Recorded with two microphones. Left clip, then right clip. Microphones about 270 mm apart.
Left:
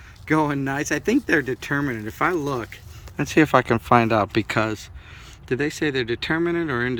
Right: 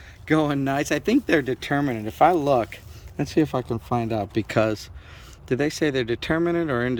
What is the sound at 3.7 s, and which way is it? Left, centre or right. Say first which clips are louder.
Speech: left 8 dB; left.